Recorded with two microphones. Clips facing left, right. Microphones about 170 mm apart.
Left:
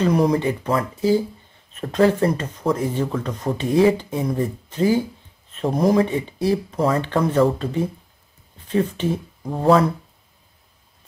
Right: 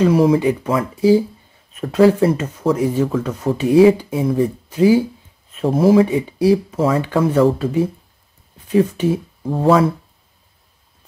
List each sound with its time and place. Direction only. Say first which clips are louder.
0.0 s speech: right 5 dB; 5° right (ahead or behind)